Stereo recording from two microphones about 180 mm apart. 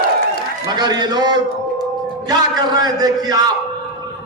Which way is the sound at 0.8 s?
25° right (ahead or behind).